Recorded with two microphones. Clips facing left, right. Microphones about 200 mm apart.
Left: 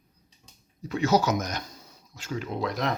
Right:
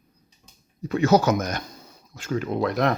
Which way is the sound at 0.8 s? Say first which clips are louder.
Right 5 dB; 55° right (ahead or behind).